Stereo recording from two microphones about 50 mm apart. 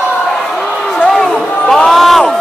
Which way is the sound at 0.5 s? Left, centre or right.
Centre.